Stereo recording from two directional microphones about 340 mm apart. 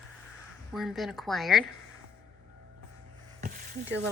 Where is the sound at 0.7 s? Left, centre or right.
Centre.